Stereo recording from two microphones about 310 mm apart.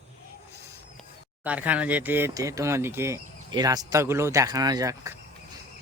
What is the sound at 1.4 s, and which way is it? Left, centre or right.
Speech, centre.